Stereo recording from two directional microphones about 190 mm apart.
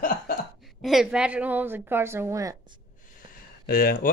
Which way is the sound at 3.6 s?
50° left (ahead or behind).